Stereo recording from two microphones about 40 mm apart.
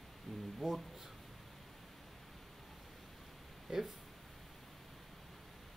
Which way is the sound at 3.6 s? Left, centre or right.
Centre.